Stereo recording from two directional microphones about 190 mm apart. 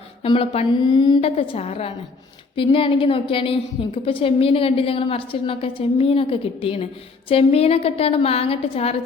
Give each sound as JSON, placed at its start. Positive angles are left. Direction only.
{"t": 0.2, "sound": "a woman's voice", "side_deg": 30}